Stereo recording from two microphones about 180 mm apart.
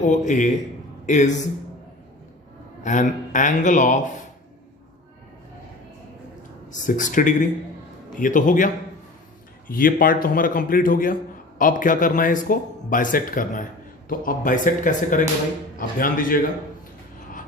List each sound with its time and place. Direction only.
0.0 s a man's voice: 45° left (ahead or behind)
2.8 s a man's voice: 45° left (ahead or behind)
6.8 s a man's voice: 45° left (ahead or behind)